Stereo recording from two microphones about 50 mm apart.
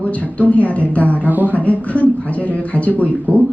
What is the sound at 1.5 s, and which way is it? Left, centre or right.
A woman's voice, left.